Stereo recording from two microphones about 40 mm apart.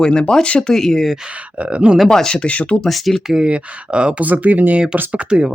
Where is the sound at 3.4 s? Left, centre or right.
Right.